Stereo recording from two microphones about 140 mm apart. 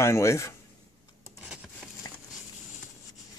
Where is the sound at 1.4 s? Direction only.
10° right (ahead or behind).